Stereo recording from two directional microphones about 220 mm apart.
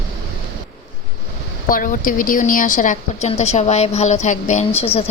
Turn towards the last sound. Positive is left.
turn(degrees=30)  # may be behind; listen again after turning